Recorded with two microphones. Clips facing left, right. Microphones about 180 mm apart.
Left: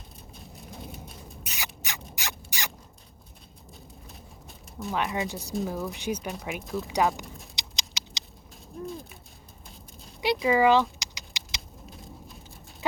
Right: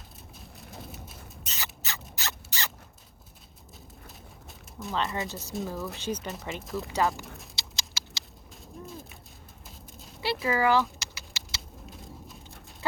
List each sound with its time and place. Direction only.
0.3 s rain: centre (ahead or behind)
1.5 s rodents: 15° left (ahead or behind)
2.1 s a sound: 15° left (ahead or behind)
4.9 s speech: 15° left (ahead or behind)
6.2 s speech: centre (ahead or behind)
6.8 s speech: 15° left (ahead or behind)
7.5 s rodents: 20° left (ahead or behind)
8.8 s a sound: centre (ahead or behind)
10.4 s keys jangling: 15° left (ahead or behind)
11.9 s a sound: centre (ahead or behind)